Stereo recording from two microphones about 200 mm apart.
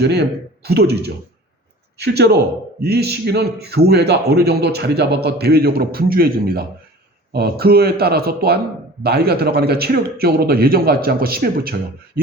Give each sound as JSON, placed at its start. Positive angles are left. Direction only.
{"t": 0.0, "sound": "a man's voice", "side_deg": -55}